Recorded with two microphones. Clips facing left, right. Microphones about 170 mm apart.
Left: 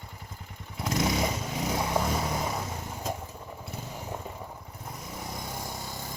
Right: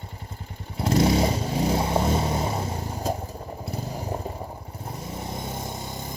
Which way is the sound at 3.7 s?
35° right (ahead or behind).